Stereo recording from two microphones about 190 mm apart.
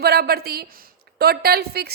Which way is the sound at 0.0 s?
55° right (ahead or behind).